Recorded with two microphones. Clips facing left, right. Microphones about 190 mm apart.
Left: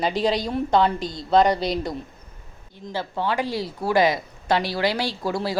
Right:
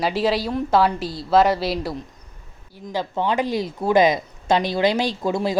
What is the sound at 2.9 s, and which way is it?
Speech, 20° right (ahead or behind).